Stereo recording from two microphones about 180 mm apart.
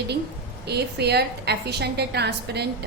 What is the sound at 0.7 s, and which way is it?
A woman's voice, 65° right (ahead or behind).